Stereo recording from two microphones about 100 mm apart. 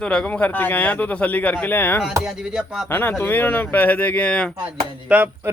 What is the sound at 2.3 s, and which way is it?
Speech, 5° right (ahead or behind).